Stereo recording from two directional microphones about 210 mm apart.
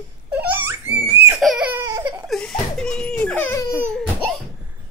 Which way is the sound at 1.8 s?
15° right (ahead or behind).